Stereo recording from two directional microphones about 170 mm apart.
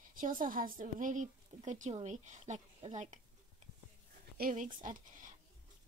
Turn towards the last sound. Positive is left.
turn(degrees=-50)  # may be behind; listen again after turning